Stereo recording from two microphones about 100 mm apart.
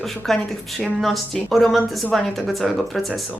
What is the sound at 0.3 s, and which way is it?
A woman's voice, 5° left (ahead or behind).